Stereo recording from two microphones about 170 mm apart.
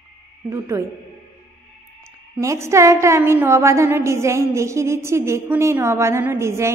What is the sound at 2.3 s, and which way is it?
A woman's voice, 15° right (ahead or behind).